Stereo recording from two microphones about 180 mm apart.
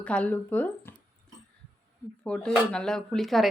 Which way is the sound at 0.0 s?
5° left (ahead or behind).